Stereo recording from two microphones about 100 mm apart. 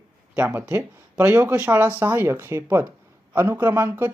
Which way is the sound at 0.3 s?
20° right (ahead or behind).